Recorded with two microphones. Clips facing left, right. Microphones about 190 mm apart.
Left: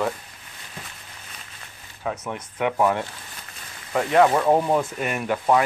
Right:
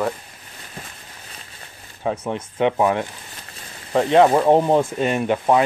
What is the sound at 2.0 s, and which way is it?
Speech, 30° right (ahead or behind).